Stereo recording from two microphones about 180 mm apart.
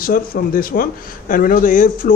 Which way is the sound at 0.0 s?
50° left (ahead or behind).